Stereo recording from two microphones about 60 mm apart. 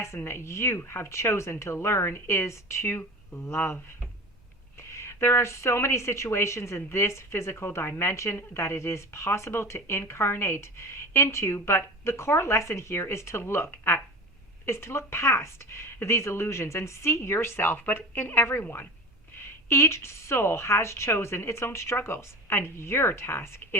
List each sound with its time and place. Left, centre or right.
0.3 s speech: left
4.8 s speech: left
14.7 s speech: left
19.6 s speech: left